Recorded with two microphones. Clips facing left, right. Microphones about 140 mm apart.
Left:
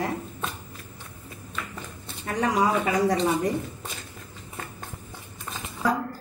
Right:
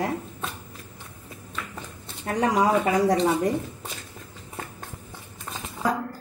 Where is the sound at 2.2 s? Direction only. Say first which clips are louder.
Right 2 dB; 50° right (ahead or behind).